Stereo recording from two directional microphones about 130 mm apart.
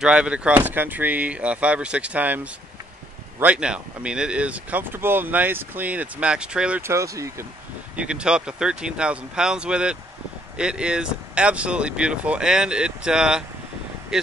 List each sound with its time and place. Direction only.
0.0 s speech: 10° right (ahead or behind)
6.8 s speech: 20° right (ahead or behind)
7.9 s speech: 10° right (ahead or behind)